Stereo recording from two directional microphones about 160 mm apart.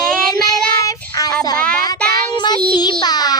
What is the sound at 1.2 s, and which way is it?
Child singing, 20° left (ahead or behind).